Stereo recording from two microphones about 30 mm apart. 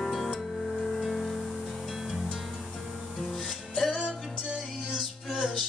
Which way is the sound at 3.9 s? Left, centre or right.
Right.